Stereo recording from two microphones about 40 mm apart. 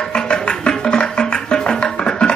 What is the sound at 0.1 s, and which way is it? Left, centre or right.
Music, left.